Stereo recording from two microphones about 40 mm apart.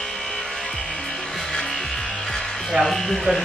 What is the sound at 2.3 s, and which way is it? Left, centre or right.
Music, centre.